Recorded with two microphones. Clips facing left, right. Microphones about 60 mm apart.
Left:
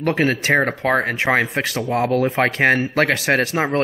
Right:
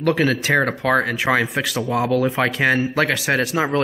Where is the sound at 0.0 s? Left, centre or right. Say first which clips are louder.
Even; left.